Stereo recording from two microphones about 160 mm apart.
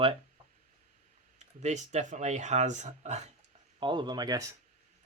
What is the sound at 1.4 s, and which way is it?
Speech, 45° right (ahead or behind).